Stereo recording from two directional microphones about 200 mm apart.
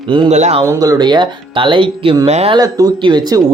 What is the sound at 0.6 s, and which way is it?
Speech, 15° right (ahead or behind).